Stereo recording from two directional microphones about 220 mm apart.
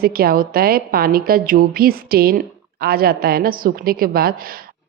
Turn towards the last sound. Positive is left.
turn(degrees=-40)  # may be behind; listen again after turning